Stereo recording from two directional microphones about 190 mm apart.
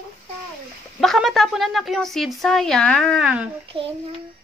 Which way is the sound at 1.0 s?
Centre (ahead or behind).